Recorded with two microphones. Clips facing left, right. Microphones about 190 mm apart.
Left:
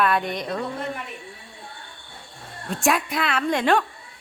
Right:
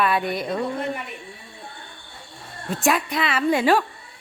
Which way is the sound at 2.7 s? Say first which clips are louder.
Right 1 dB; centre (ahead or behind).